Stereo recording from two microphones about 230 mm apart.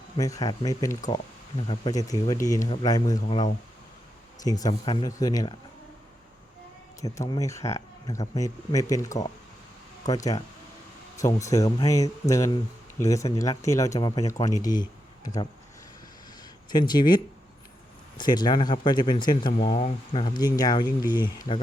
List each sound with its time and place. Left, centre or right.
0.2 s speech: centre
7.0 s speech: centre
14.6 s a sound: centre
16.7 s speech: centre
18.2 s speech: centre